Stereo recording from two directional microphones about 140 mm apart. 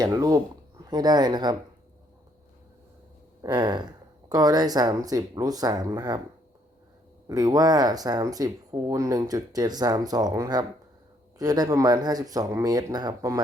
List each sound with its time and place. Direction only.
0.0 s a sound: 25° right (ahead or behind)
3.4 s speech: 30° right (ahead or behind)
7.3 s speech: 25° right (ahead or behind)